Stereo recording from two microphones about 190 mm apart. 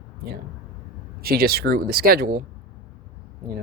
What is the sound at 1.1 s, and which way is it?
Speech, 55° right (ahead or behind).